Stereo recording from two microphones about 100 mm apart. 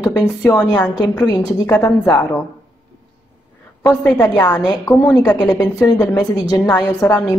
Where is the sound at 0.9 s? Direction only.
40° left (ahead or behind).